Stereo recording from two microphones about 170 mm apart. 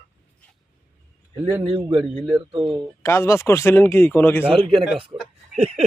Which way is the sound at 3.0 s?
15° left (ahead or behind).